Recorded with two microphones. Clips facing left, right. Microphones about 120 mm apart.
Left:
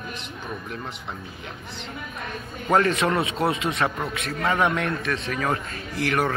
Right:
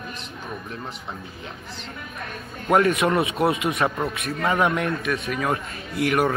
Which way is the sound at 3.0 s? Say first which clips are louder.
Right 2 dB; 25° right (ahead or behind).